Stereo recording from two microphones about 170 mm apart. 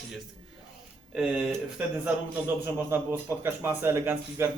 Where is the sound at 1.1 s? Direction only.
5° right (ahead or behind).